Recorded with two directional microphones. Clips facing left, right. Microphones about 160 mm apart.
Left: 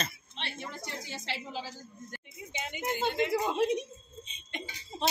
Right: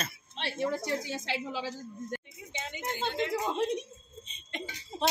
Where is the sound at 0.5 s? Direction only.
35° right (ahead or behind).